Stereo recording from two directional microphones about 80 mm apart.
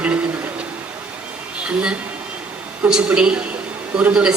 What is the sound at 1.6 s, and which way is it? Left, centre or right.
A woman's voice, centre.